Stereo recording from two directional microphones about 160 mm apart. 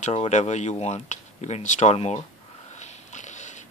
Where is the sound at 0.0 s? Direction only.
45° left (ahead or behind).